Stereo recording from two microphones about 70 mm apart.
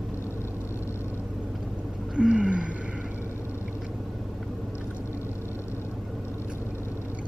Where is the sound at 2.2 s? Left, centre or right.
Centre.